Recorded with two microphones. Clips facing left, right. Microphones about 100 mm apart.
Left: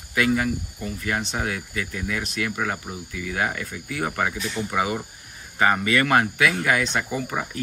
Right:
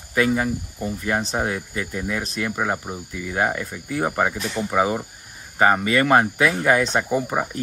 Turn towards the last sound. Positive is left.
turn(degrees=-20)  # may be behind; listen again after turning